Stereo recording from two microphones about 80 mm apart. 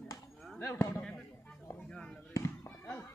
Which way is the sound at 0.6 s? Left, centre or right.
Left.